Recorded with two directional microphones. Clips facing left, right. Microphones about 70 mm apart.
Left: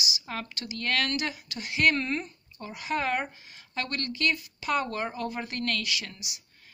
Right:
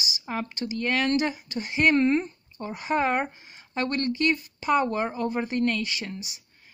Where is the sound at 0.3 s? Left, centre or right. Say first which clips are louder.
Right 6 dB; right.